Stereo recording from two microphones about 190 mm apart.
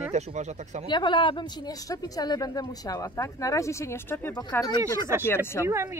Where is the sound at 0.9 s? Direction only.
25° left (ahead or behind).